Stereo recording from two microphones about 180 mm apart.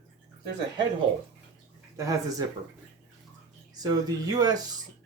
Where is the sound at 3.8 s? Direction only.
20° right (ahead or behind).